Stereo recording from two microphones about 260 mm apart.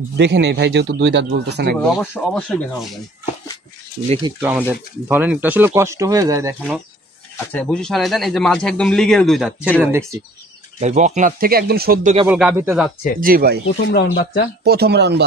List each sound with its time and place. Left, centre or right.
0.2 s speech: right
2.0 s speech: centre
4.4 s speech: centre
7.3 s speech: centre
10.8 s speech: right
12.3 s speech: centre
13.2 s speech: right
13.9 s speech: left
14.6 s speech: right